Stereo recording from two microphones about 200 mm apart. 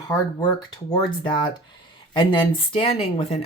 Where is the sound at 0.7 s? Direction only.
20° left (ahead or behind).